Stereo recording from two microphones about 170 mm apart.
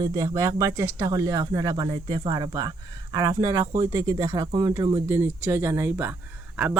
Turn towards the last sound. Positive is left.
turn(degrees=-10)  # may be behind; listen again after turning